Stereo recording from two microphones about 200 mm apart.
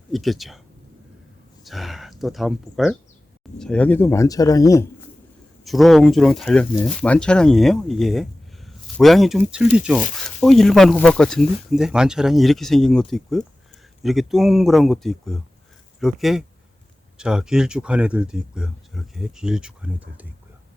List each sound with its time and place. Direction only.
0.1 s speech: centre (ahead or behind)
1.6 s speech: centre (ahead or behind); by 4.9 s 15° left (ahead or behind)
5.6 s speech: centre (ahead or behind)